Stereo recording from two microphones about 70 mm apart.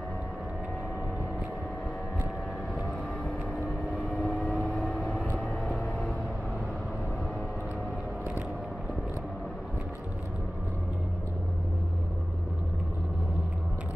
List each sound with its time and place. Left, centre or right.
4.1 s vehicle: centre
5.1 s vehicle: centre